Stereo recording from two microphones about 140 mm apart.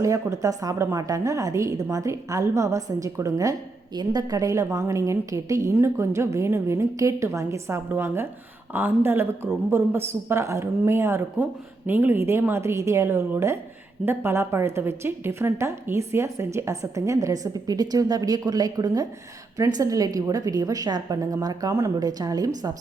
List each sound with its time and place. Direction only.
0.0 s a woman's voice: 20° right (ahead or behind)